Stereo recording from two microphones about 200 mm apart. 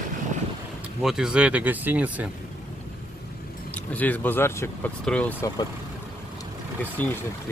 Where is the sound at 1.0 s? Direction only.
5° right (ahead or behind).